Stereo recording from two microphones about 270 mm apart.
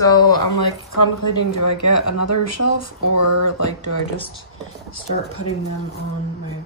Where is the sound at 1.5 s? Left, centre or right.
Left.